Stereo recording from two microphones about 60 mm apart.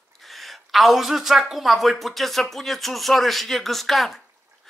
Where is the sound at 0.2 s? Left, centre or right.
Centre.